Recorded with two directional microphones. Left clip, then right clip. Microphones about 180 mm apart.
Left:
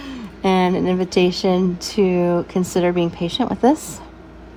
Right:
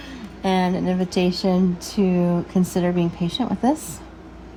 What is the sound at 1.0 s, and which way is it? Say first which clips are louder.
Speech: left 6 dB; 45° left (ahead or behind).